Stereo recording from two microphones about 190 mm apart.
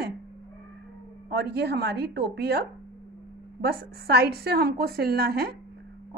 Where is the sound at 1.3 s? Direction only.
60° right (ahead or behind).